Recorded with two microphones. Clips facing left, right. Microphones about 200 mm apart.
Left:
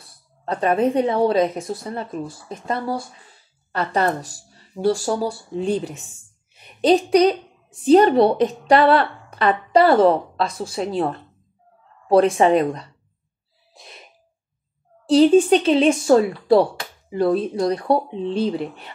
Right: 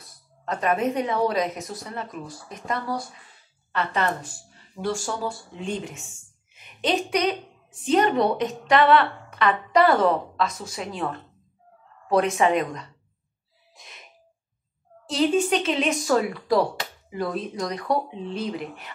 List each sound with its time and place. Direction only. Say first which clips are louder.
0.0 s a woman's voice: left 3 dB; 30° left (ahead or behind)
13.7 s a sound: left 5 dB; 35° left (ahead or behind)
15.0 s a woman's voice: left 9 dB; 35° left (ahead or behind)